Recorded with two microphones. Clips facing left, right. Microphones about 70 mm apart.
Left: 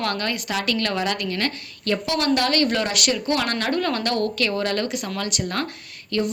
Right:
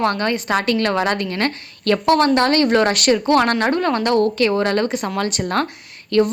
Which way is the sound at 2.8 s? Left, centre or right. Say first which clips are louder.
Right 7 dB; right.